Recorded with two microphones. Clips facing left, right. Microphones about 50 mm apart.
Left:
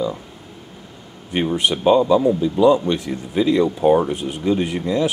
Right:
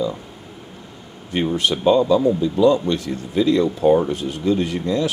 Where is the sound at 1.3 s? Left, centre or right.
Centre.